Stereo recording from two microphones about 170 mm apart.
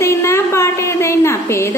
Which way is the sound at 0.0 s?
15° left (ahead or behind).